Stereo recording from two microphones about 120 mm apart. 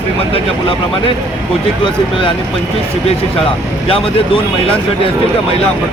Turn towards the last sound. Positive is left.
turn(degrees=50)  # may be behind; listen again after turning